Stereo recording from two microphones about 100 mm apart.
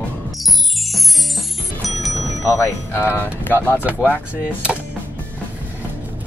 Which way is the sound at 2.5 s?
25° left (ahead or behind).